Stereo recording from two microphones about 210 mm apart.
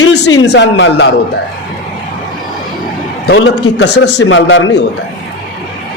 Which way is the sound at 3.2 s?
55° left (ahead or behind).